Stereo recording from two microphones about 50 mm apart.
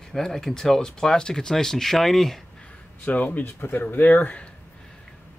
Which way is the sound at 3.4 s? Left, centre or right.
Left.